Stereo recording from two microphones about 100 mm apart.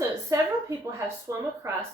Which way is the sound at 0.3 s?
35° right (ahead or behind).